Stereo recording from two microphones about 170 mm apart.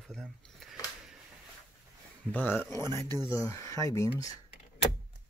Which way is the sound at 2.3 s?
10° left (ahead or behind).